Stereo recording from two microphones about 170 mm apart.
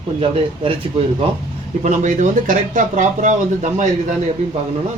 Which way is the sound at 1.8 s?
45° right (ahead or behind).